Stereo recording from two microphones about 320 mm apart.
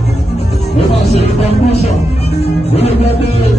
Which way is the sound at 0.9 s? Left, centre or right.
Centre.